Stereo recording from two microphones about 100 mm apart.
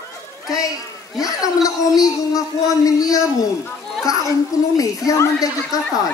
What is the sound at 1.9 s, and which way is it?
A child's voice, 35° left (ahead or behind).